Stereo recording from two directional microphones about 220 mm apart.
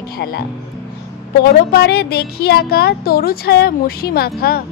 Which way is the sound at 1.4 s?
45° left (ahead or behind).